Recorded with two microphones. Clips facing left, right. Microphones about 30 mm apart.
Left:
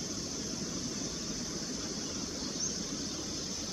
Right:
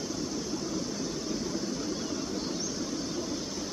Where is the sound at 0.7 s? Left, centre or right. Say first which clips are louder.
Right 5 dB; centre.